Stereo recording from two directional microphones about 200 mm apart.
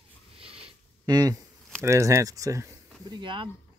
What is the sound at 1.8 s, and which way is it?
Speech, 15° right (ahead or behind).